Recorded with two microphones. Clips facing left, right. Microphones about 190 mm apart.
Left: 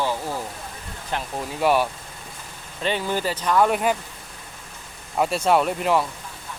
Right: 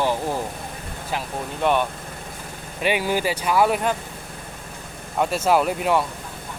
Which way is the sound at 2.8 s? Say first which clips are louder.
Right 2 dB; 10° right (ahead or behind).